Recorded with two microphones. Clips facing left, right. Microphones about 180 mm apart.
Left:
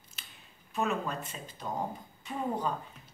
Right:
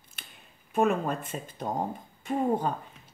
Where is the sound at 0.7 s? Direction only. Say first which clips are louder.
Right 7 dB; 50° right (ahead or behind).